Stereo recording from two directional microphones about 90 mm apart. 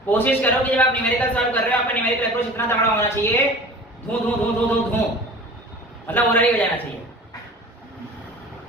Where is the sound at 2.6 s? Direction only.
30° left (ahead or behind).